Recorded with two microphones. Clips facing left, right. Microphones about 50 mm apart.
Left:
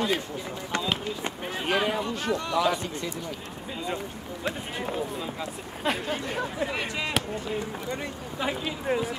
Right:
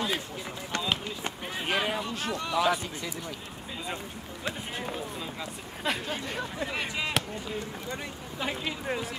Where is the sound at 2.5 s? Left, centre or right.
Centre.